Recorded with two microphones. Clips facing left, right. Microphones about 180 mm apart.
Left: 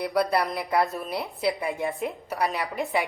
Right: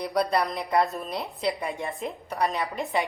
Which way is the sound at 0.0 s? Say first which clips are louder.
Left 1 dB; 5° left (ahead or behind).